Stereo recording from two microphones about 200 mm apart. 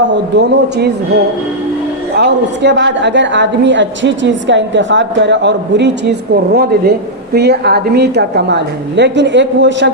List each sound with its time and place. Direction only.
0.1 s a woman's voice: 60° right (ahead or behind)
2.1 s a woman's voice: 60° right (ahead or behind)